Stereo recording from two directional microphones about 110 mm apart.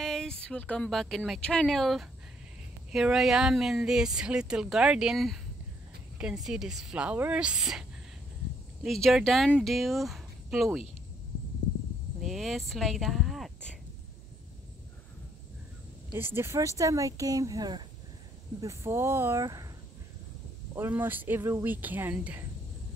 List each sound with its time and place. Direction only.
0.0 s speech: 5° left (ahead or behind)
8.8 s speech: centre (ahead or behind)
12.2 s speech: centre (ahead or behind)
16.1 s speech: 20° right (ahead or behind); by 17.8 s 40° right (ahead or behind)
18.6 s speech: 25° right (ahead or behind)
19.4 s speech: 30° right (ahead or behind)
20.7 s speech: 20° right (ahead or behind)